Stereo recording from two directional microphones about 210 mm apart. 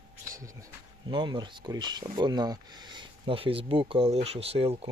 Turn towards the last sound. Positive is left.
turn(degrees=-30)  # may be behind; listen again after turning